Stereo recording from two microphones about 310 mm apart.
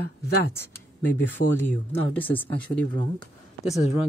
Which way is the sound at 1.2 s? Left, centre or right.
Centre.